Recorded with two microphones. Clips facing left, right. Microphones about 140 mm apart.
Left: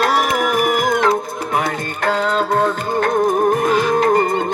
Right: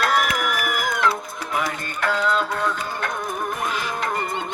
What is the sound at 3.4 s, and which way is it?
Music, 80° left.